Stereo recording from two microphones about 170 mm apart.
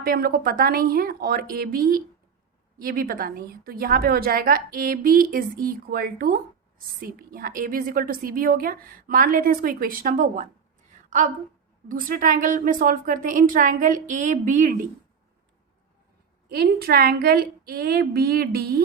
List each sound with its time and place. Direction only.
0.0 s a woman's voice: 60° right (ahead or behind); by 10.5 s 45° right (ahead or behind)
11.9 s a woman's voice: 55° right (ahead or behind)
16.5 s a woman's voice: 65° right (ahead or behind)